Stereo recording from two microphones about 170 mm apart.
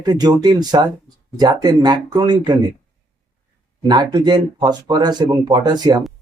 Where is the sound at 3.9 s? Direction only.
25° right (ahead or behind).